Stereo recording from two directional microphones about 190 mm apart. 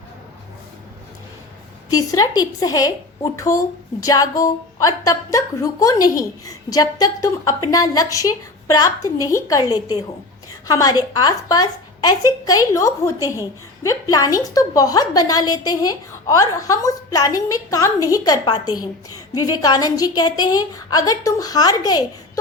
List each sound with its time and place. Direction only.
1.9 s a woman's voice: 20° left (ahead or behind)